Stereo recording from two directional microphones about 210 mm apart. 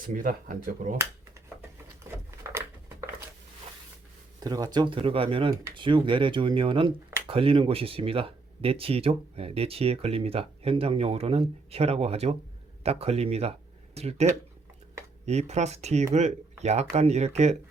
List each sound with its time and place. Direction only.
0.0 s speech: 40° right (ahead or behind)
2.4 s a sound: 15° right (ahead or behind)
4.4 s speech: 20° right (ahead or behind)